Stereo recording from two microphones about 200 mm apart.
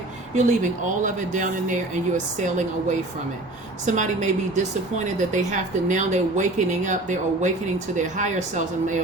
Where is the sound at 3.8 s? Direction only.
35° right (ahead or behind).